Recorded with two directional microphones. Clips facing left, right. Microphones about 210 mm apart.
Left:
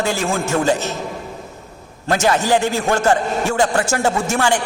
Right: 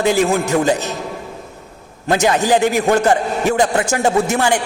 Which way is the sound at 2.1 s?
20° right (ahead or behind).